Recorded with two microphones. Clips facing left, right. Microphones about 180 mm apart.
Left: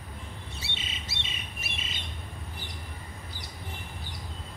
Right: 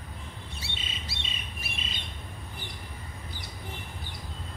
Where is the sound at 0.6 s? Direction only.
20° left (ahead or behind).